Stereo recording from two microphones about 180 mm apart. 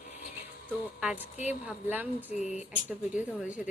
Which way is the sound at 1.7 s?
10° right (ahead or behind).